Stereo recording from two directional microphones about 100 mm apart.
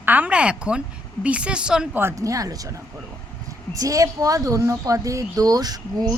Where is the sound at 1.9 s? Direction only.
30° right (ahead or behind).